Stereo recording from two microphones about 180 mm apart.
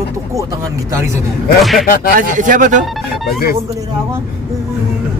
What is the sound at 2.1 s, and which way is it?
Speech, 45° right (ahead or behind).